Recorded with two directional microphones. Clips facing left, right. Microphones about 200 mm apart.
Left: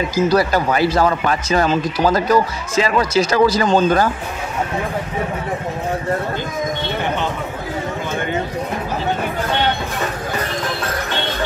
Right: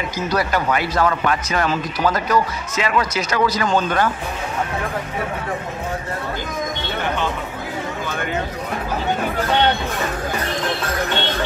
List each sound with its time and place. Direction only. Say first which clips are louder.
0.1 s speech: left 5 dB; 30° left (ahead or behind)